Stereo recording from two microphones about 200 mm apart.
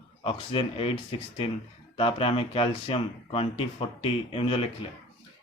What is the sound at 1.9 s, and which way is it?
A man's voice, 25° left (ahead or behind).